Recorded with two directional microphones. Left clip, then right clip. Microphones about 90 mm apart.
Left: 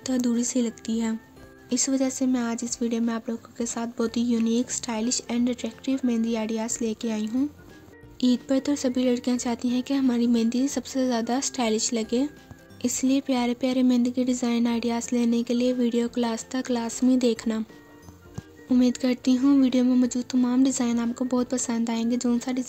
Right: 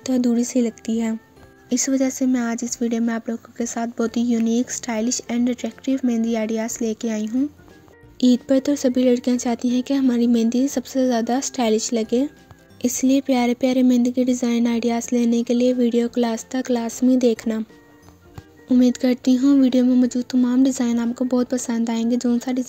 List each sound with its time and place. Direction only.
0.0 s speech: 45° right (ahead or behind)
8.2 s speech: 55° right (ahead or behind); by 17.6 s 35° right (ahead or behind)
18.8 s speech: 50° right (ahead or behind)